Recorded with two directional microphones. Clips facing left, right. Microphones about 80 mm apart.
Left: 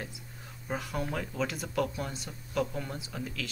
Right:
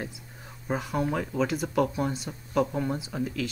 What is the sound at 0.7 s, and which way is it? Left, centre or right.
Speech, centre.